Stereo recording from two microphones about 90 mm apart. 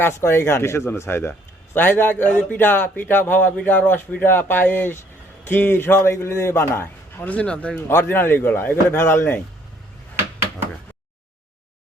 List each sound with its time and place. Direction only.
0.0 s speech: 30° left (ahead or behind)
7.3 s speech: 15° left (ahead or behind)
7.8 s speech: 25° left (ahead or behind)